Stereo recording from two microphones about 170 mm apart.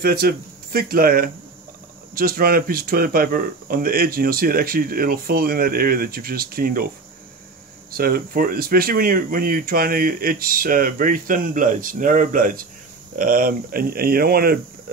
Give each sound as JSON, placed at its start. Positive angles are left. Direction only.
{"t": 0.0, "sound": "speech", "side_deg": -65}
{"t": 7.9, "sound": "speech", "side_deg": -60}